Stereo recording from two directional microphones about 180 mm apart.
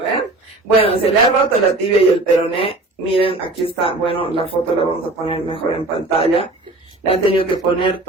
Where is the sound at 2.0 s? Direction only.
30° left (ahead or behind).